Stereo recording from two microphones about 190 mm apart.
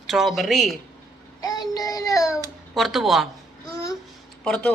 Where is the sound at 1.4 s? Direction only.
20° left (ahead or behind).